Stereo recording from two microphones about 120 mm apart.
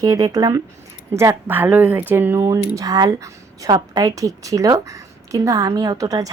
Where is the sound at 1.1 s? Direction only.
20° right (ahead or behind).